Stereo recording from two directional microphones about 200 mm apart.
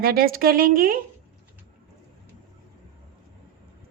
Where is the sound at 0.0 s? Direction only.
50° right (ahead or behind).